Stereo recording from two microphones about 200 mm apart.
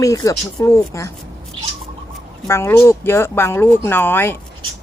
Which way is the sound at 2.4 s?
15° left (ahead or behind).